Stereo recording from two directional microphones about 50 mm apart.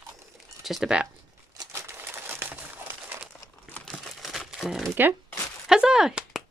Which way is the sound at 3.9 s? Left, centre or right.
Centre.